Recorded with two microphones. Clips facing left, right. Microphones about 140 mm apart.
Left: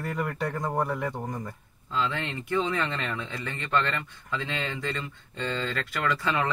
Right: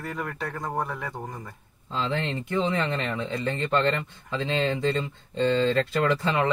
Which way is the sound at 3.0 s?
25° right (ahead or behind).